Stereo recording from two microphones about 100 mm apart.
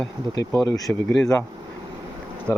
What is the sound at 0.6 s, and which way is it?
Speech, 35° left (ahead or behind).